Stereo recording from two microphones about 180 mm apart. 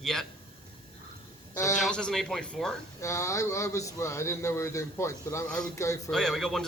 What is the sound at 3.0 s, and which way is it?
A man's voice, 15° left (ahead or behind).